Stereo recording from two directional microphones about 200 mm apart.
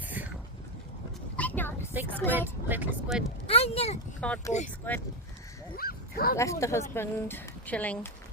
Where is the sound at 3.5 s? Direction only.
30° left (ahead or behind).